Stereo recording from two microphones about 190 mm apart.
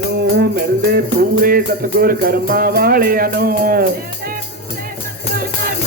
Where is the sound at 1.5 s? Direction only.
50° right (ahead or behind).